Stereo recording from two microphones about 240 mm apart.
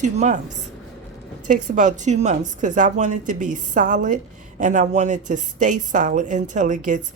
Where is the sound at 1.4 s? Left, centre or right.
Right.